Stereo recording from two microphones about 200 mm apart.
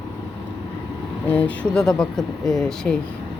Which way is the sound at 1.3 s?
5° left (ahead or behind).